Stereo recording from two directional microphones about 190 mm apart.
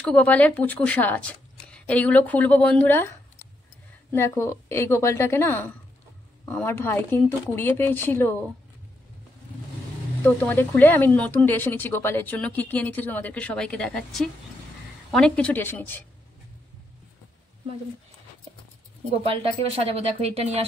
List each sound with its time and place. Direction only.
0.0 s speech: 5° left (ahead or behind)
10.2 s speech: 10° left (ahead or behind)
19.0 s speech: 30° right (ahead or behind)